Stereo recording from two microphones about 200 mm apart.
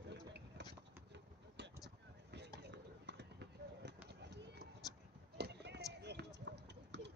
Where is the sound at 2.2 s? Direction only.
60° right (ahead or behind).